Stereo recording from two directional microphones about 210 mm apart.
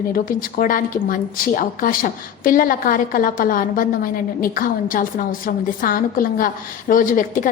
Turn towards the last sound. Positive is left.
turn(degrees=40)  # may be behind; listen again after turning